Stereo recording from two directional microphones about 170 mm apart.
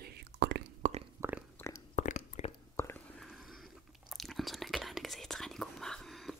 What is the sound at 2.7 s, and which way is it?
Whispering, 15° left (ahead or behind).